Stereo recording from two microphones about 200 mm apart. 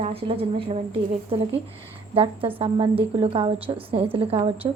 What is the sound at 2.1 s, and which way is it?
A woman's voice, 25° right (ahead or behind).